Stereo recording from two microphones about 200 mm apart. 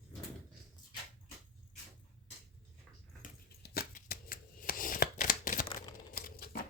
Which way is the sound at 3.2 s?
45° left (ahead or behind).